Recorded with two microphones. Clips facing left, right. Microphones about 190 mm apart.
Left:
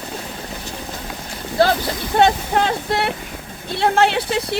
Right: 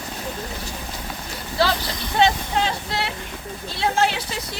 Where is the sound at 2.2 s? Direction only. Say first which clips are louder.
Left 4 dB; 55° left (ahead or behind).